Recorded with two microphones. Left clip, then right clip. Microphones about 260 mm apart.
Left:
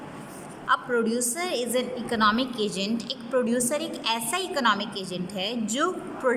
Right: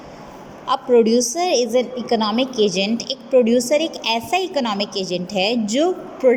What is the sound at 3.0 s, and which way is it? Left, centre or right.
A woman's voice, centre.